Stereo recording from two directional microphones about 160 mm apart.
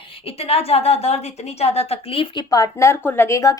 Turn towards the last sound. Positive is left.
turn(degrees=20)  # may be behind; listen again after turning